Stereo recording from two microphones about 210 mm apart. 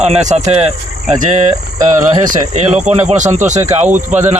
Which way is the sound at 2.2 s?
35° right (ahead or behind).